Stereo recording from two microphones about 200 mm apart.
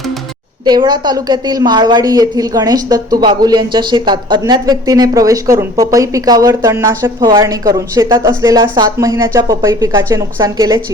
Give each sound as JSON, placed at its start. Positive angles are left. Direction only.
{"t": 0.6, "sound": "a woman's voice", "side_deg": -20}